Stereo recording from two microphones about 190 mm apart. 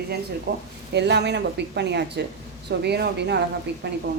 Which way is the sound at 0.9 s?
65° right (ahead or behind).